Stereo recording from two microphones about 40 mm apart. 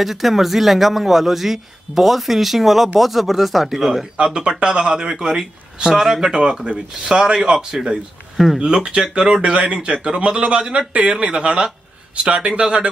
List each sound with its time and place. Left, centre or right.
0.0 s a man's voice: centre
4.2 s a man's voice: right
9.4 s a man's voice: right